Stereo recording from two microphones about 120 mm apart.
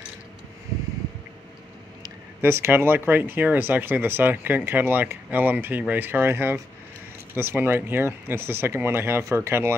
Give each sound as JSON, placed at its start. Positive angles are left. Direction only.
{"t": 2.4, "sound": "speech", "side_deg": -20}